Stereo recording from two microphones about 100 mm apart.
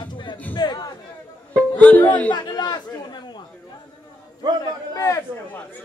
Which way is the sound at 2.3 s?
45° left (ahead or behind).